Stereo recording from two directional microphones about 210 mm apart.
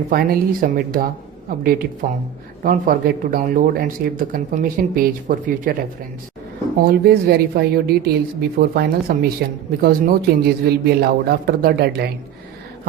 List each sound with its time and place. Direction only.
0.1 s speech: 45° right (ahead or behind)
6.8 s speech: 45° right (ahead or behind)